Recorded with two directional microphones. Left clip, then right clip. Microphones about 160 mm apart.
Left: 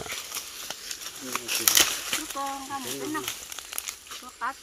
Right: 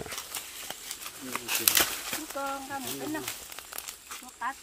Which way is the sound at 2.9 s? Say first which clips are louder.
Left 3 dB; 5° right (ahead or behind).